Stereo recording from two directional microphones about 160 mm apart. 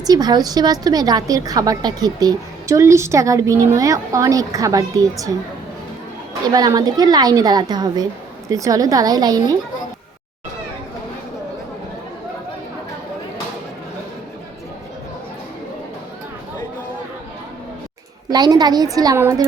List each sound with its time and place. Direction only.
0.0 s a woman's voice: 25° right (ahead or behind)
6.4 s a woman's voice: 25° right (ahead or behind)
18.3 s a woman's voice: 25° right (ahead or behind)